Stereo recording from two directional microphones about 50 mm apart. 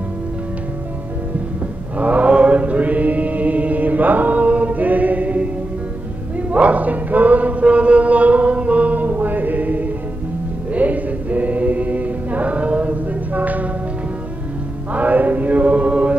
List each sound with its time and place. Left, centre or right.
2.0 s chant: right
6.3 s singing: right
10.7 s choir: right
14.9 s mantra: right